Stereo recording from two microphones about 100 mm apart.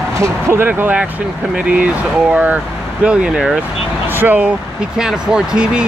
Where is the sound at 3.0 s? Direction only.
10° right (ahead or behind).